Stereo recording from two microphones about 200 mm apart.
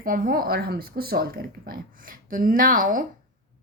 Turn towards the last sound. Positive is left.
turn(degrees=-45)  # may be behind; listen again after turning